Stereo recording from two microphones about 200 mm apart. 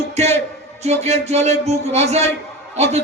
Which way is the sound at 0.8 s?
30° right (ahead or behind).